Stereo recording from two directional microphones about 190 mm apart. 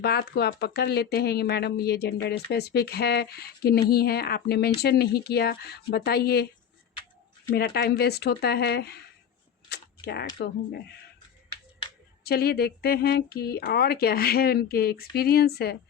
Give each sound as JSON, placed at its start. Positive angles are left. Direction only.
{"t": 0.0, "sound": "speech", "side_deg": 55}
{"t": 7.5, "sound": "speech", "side_deg": 55}
{"t": 9.6, "sound": "camera", "side_deg": 60}
{"t": 12.2, "sound": "speech", "side_deg": 55}